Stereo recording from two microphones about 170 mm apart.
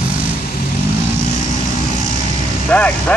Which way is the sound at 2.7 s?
10° left (ahead or behind).